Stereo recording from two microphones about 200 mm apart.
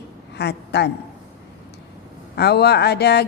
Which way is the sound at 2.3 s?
55° left (ahead or behind).